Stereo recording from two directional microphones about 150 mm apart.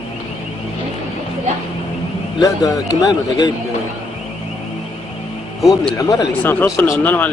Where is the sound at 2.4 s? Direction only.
25° left (ahead or behind).